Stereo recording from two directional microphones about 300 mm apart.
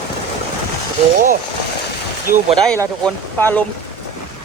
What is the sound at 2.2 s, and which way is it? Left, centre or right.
Speech, right.